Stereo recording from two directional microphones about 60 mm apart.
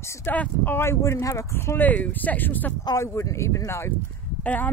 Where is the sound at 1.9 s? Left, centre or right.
Left.